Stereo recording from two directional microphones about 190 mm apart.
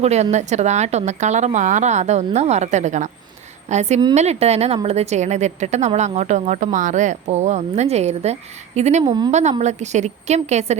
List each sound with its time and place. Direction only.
0.0 s a woman's voice: 35° right (ahead or behind)